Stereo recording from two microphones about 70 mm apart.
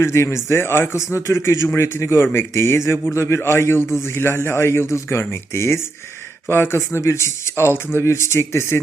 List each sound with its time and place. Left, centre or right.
0.0 s a man's voice: left